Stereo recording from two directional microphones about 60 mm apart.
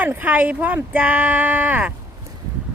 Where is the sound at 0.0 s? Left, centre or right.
Right.